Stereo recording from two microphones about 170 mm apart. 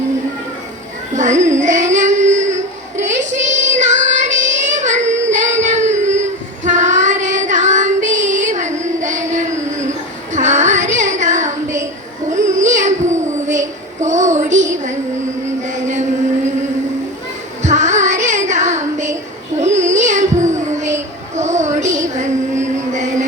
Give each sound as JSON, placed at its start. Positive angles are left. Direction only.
{"t": 1.1, "sound": "child singing", "side_deg": -45}
{"t": 12.5, "sound": "music", "side_deg": -45}
{"t": 13.5, "sound": "child singing", "side_deg": -45}
{"t": 15.6, "sound": "a sound", "side_deg": -45}
{"t": 17.6, "sound": "child singing", "side_deg": -45}
{"t": 19.5, "sound": "a sound", "side_deg": -45}